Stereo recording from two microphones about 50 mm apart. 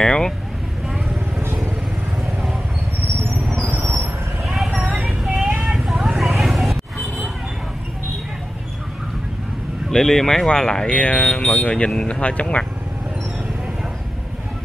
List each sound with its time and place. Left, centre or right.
0.0 s speech: centre
4.5 s vehicle: centre
5.0 s child singing: centre
5.6 s vehicle: centre
9.8 s speech: centre
10.9 s speech: left